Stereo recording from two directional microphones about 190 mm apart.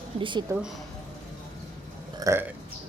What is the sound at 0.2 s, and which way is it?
Speech, 25° right (ahead or behind).